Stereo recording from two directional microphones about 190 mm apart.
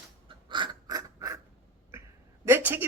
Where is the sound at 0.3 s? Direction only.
25° right (ahead or behind).